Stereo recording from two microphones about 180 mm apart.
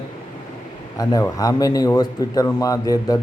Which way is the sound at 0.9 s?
20° left (ahead or behind).